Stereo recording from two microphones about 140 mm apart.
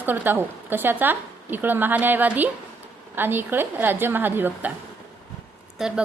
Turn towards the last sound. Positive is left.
turn(degrees=-5)  # may be behind; listen again after turning